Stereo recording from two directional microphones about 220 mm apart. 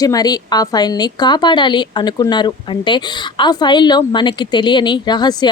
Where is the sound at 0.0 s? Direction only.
15° left (ahead or behind).